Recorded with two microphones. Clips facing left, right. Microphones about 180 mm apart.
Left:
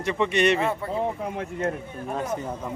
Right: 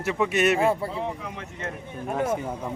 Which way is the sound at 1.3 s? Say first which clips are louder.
Left 7 dB; 45° left (ahead or behind).